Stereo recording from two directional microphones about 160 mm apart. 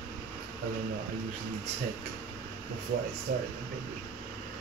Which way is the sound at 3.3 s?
60° right (ahead or behind).